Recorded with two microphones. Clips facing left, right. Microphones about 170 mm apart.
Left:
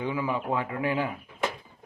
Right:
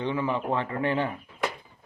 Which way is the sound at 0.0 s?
10° left (ahead or behind).